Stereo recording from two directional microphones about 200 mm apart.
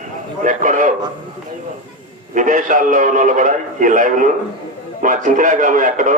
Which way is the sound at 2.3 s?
40° right (ahead or behind).